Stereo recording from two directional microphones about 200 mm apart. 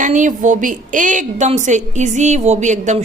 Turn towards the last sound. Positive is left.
turn(degrees=-35)  # may be behind; listen again after turning